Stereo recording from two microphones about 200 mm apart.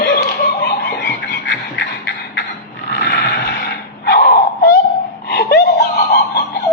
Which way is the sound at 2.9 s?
55° left (ahead or behind).